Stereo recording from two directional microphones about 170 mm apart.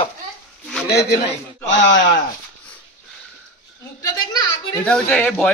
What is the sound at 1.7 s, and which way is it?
Speech, 90° left.